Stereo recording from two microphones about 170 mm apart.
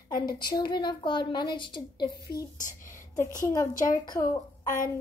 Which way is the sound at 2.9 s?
50° left (ahead or behind).